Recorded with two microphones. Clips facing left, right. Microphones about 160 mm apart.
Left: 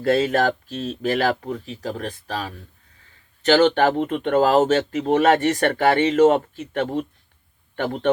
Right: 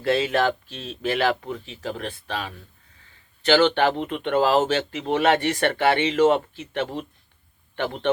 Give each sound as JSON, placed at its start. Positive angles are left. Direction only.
{"t": 0.0, "sound": "speech", "side_deg": 45}